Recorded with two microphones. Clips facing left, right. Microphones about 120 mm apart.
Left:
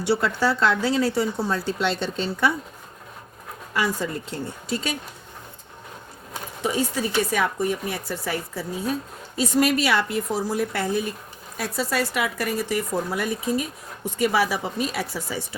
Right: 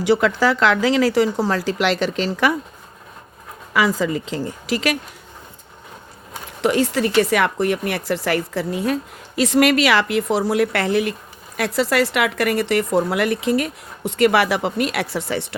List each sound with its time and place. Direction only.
0.0 s speech: 90° right
3.7 s speech: 90° right
6.6 s a woman's voice: 75° right (ahead or behind)